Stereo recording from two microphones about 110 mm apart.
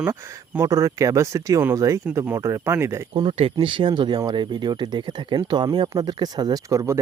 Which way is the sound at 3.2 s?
65° right (ahead or behind).